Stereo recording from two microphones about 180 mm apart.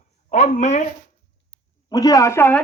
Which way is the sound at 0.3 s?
40° left (ahead or behind).